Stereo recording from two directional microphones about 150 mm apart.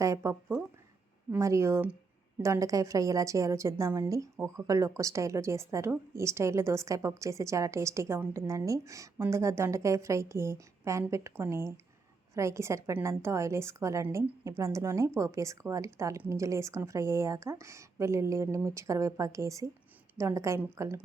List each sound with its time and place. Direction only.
0.0 s a woman's voice: 20° right (ahead or behind)